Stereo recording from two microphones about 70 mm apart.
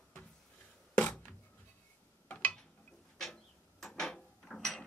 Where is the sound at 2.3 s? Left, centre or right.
Left.